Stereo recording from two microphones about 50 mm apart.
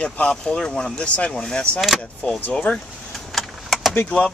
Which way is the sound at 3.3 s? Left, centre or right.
Centre.